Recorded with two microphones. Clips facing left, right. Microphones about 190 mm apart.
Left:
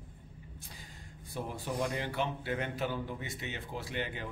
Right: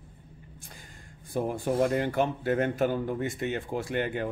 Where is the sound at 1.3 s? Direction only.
50° right (ahead or behind).